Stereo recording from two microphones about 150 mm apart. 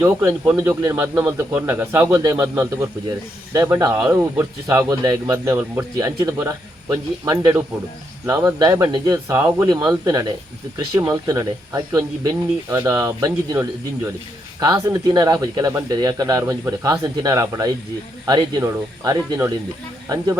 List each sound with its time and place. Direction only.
0.0 s speech: 15° right (ahead or behind)